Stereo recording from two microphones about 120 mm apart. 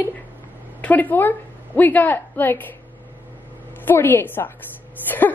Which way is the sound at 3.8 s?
15° left (ahead or behind).